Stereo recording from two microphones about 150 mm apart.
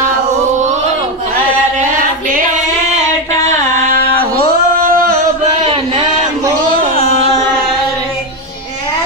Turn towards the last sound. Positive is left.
turn(degrees=45)  # may be behind; listen again after turning